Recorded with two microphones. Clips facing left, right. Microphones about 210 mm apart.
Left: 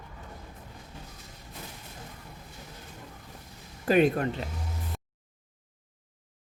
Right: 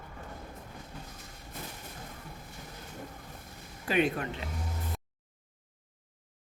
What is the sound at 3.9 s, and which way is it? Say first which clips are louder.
Speech: left 6 dB; 40° left (ahead or behind).